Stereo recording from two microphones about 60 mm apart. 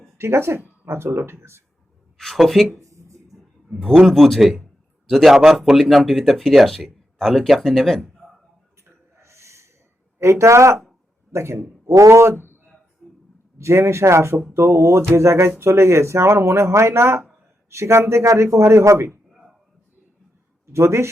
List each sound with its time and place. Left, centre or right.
0.2 s speech: right
2.1 s speech: centre
2.7 s a sound: right
4.1 s speech: centre
8.9 s a sound: right
10.2 s speech: right
12.4 s a sound: left
13.6 s a man's voice: right
20.7 s speech: right